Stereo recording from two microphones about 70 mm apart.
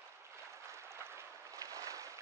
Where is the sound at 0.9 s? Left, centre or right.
Right.